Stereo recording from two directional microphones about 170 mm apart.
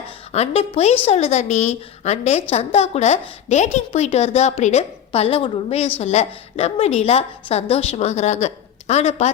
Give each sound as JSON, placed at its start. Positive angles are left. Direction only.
{"t": 0.3, "sound": "a woman's voice", "side_deg": 35}